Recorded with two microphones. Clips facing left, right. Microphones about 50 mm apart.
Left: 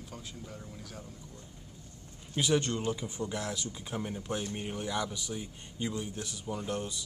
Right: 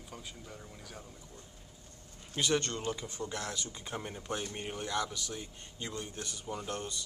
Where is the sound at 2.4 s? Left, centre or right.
Centre.